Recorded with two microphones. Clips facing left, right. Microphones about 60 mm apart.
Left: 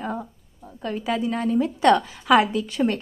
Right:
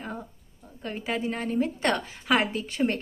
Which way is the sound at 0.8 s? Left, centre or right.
Right.